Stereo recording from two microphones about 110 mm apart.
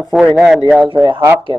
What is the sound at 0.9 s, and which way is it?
Speech, 40° right (ahead or behind).